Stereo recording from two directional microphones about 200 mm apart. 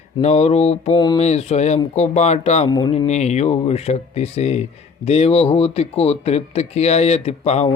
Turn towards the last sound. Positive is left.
turn(degrees=30)  # may be behind; listen again after turning